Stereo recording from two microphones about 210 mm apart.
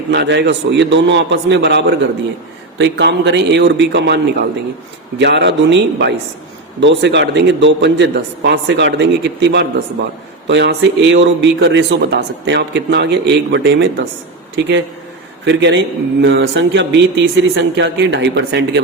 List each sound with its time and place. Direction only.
0.1 s speech: 55° right (ahead or behind)